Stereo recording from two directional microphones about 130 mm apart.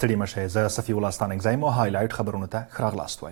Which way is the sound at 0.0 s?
20° right (ahead or behind).